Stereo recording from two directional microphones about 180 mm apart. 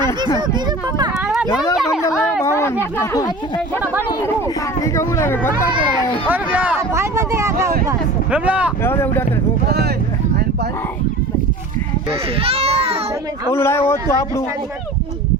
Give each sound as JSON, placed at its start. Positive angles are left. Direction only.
{"t": 1.7, "sound": "speech", "side_deg": -5}
{"t": 2.4, "sound": "speech", "side_deg": 15}
{"t": 4.9, "sound": "speech", "side_deg": 15}
{"t": 6.2, "sound": "speech", "side_deg": -10}
{"t": 8.8, "sound": "speech", "side_deg": 15}
{"t": 12.4, "sound": "a sound", "side_deg": -30}
{"t": 13.5, "sound": "speech", "side_deg": 15}